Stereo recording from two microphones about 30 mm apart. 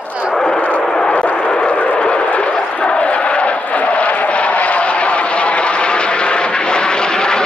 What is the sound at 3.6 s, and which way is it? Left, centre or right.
Vehicle, left.